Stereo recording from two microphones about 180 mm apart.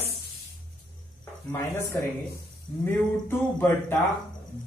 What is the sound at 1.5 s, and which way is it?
A man's voice, 15° left (ahead or behind).